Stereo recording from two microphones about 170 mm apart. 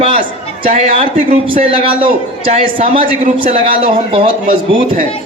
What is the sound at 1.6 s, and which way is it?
Speech, 35° right (ahead or behind).